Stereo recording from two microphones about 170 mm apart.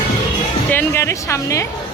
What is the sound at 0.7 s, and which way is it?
Speech, 10° left (ahead or behind).